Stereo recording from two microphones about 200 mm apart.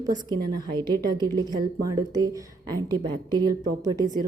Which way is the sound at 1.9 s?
20° right (ahead or behind).